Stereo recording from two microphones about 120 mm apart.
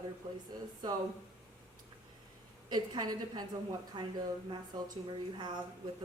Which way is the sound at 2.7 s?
35° right (ahead or behind).